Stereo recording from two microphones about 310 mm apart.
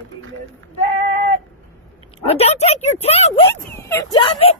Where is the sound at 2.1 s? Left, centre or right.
Centre.